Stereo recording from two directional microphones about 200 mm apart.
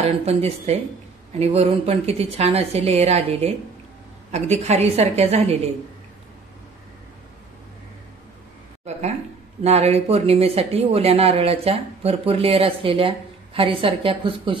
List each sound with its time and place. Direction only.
0.0 s a woman's voice: 30° right (ahead or behind)
9.6 s speech: 30° right (ahead or behind)